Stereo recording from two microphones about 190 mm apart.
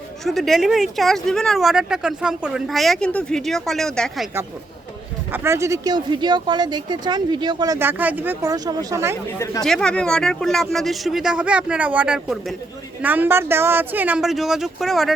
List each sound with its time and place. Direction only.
0.3 s speech: centre (ahead or behind)
5.3 s speech: 15° right (ahead or behind)
9.4 s speech: 15° left (ahead or behind)
9.6 s speech: 5° left (ahead or behind)